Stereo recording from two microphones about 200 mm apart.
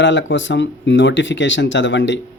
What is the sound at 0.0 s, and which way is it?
Speech, 65° left (ahead or behind).